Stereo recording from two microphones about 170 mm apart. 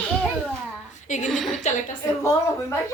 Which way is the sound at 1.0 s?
45° left (ahead or behind).